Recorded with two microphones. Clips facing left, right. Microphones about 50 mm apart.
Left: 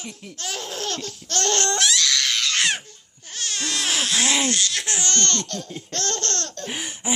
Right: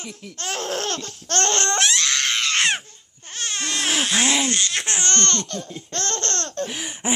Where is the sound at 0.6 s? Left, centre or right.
Right.